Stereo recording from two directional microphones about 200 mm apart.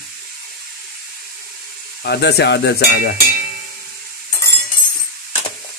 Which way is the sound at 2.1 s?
55° left (ahead or behind).